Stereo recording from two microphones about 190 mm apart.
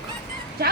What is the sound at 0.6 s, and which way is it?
Speech, 55° right (ahead or behind).